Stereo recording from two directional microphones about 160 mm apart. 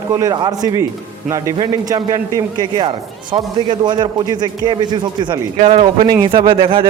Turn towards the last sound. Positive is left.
turn(degrees=-35)  # may be behind; listen again after turning